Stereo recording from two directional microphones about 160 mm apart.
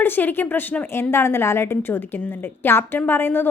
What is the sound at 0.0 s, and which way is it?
A woman's voice, 10° left (ahead or behind).